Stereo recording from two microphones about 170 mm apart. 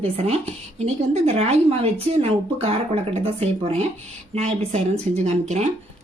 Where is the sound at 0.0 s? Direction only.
35° right (ahead or behind).